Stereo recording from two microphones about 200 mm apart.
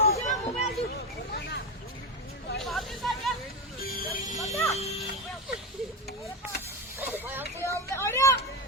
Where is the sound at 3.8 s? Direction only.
45° left (ahead or behind).